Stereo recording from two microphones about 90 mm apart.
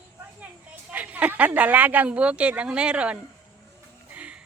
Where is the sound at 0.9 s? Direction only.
15° right (ahead or behind).